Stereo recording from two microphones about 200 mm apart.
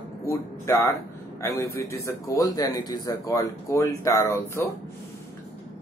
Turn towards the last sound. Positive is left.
turn(degrees=15)  # may be behind; listen again after turning